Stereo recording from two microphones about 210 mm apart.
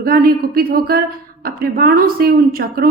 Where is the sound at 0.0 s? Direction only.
45° right (ahead or behind).